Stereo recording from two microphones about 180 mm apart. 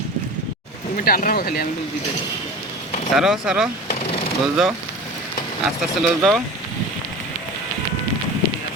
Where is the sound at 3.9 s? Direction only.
35° left (ahead or behind).